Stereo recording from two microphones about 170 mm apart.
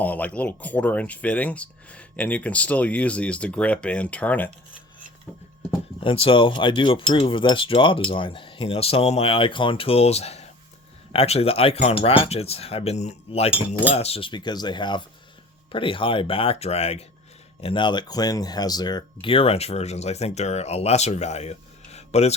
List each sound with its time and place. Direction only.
0.0 s speech: 10° left (ahead or behind)
6.0 s speech: 30° left (ahead or behind)
13.8 s cutlery: 35° left (ahead or behind)
15.7 s speech: 30° left (ahead or behind)